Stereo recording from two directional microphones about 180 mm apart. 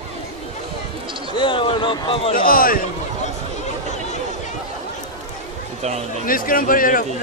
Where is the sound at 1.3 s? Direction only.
30° left (ahead or behind).